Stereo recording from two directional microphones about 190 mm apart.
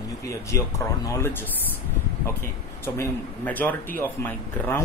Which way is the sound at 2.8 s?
10° left (ahead or behind).